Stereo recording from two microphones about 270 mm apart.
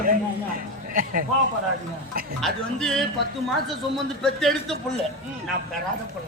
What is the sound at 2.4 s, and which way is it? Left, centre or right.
Speech, centre.